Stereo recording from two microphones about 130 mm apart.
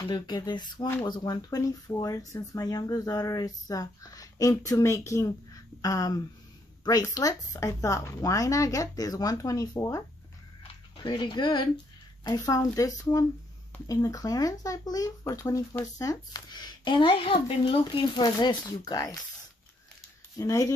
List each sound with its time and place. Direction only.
0.0 s speech: 30° left (ahead or behind)
20.3 s speech: 25° left (ahead or behind)